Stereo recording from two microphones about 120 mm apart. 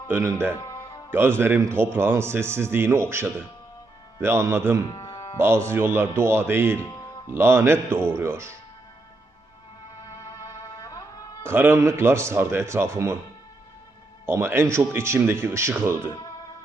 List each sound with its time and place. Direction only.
0.1 s a man's voice: 25° right (ahead or behind)
4.9 s music: 30° left (ahead or behind)
5.4 s a man's voice: 20° right (ahead or behind)
6.7 s music: 10° left (ahead or behind)
7.3 s a man's voice: 20° right (ahead or behind)
10.1 s music: 25° left (ahead or behind)
11.4 s a man's voice: 20° right (ahead or behind)
14.3 s a man's voice: 20° right (ahead or behind)